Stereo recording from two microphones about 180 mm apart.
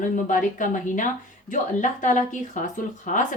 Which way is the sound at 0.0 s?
45° left (ahead or behind).